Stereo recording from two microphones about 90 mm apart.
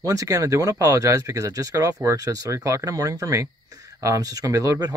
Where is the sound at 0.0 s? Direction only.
40° right (ahead or behind).